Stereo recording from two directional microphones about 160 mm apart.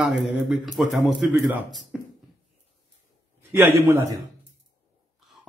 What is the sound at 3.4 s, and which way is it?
Speech, 15° right (ahead or behind).